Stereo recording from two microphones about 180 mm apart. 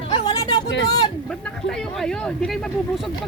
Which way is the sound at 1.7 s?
5° left (ahead or behind).